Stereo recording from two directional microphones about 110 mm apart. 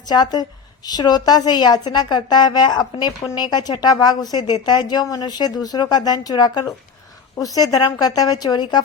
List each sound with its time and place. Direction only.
0.1 s a woman's voice: 40° left (ahead or behind)